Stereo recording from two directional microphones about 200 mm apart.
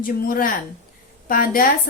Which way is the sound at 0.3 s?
45° left (ahead or behind).